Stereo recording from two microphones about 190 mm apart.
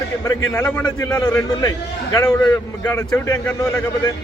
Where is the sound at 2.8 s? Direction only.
10° left (ahead or behind).